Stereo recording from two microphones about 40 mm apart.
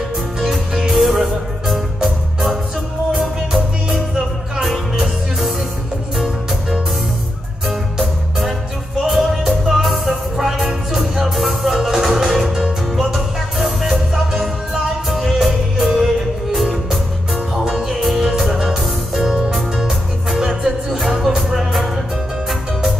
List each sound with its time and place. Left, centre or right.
0.4 s music: centre
4.6 s music: centre
7.6 s music: centre
17.6 s music: centre
20.3 s music: centre
21.5 s music: centre